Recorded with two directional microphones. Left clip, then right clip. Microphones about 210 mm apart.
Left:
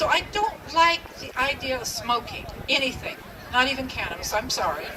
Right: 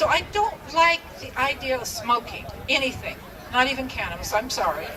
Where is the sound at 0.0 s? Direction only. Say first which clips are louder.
Right 2 dB; 20° right (ahead or behind).